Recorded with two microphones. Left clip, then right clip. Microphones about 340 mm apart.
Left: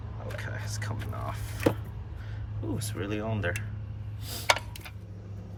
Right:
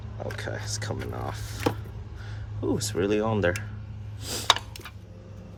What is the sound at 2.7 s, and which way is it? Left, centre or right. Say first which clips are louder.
Speech: right 10 dB; centre.